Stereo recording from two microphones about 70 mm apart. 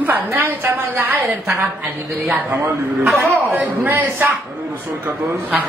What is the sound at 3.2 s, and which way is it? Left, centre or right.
A woman's voice, right.